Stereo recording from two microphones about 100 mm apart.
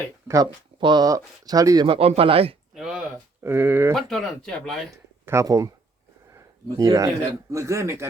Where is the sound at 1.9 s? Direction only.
80° right.